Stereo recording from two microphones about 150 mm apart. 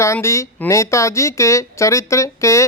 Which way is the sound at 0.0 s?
20° left (ahead or behind).